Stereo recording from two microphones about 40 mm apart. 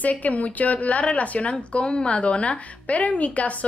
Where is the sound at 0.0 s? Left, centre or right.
Left.